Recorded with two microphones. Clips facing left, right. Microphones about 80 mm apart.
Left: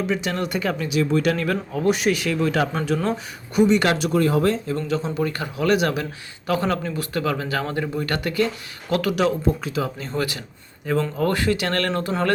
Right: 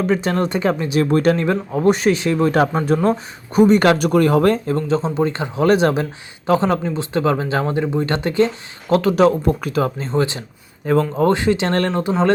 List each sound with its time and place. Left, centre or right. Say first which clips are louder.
0.1 s speech: right 6 dB; right
2.5 s speech: right 6 dB; right
4.9 s speech: right 5 dB; right
9.4 s speech: right 4 dB; right
10.0 s speech: right 6 dB; right
10.9 s speech: right 6 dB; right
11.2 s speech: right 5 dB; right